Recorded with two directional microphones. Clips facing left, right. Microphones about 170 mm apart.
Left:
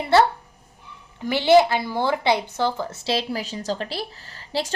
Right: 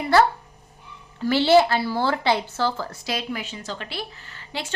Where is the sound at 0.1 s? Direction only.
25° left (ahead or behind).